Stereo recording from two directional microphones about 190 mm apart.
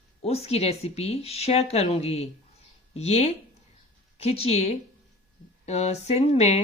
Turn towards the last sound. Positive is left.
turn(degrees=35)  # may be behind; listen again after turning